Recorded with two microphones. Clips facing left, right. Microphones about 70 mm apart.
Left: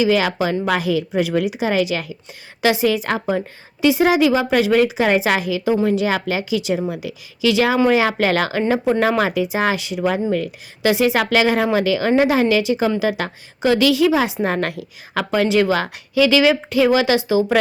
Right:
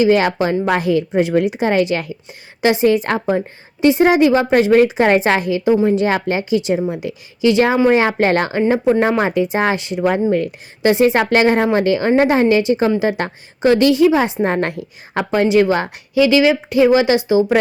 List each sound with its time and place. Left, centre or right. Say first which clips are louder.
0.0 s a woman's voice: right 3 dB; right
8.8 s speech: right 3 dB; centre
9.3 s a woman's voice: right 3 dB; right